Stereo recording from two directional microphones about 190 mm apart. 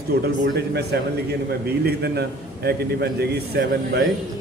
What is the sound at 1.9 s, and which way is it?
A man's voice, 60° right (ahead or behind).